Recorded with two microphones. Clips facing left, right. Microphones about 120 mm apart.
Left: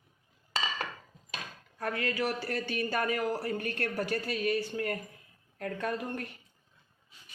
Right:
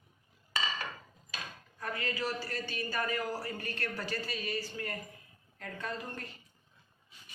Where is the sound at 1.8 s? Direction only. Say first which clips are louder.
Left 5 dB; 65° left (ahead or behind).